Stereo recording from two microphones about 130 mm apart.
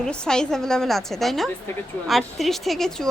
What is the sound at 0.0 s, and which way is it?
A woman's voice, 5° left (ahead or behind).